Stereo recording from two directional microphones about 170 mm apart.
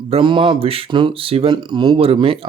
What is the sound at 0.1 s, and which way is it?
Speech, 30° right (ahead or behind).